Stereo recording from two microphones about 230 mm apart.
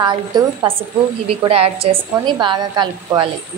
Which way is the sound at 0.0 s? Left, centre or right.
Centre.